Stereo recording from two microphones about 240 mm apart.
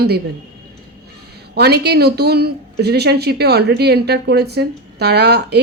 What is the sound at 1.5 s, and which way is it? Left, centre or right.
Speech, right.